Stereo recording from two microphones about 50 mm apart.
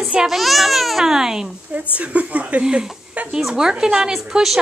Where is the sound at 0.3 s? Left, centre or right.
Centre.